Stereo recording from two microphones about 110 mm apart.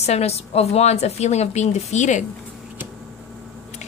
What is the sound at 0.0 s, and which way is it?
A woman's voice, 75° left (ahead or behind).